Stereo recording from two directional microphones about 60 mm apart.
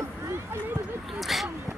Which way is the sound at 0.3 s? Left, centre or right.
Right.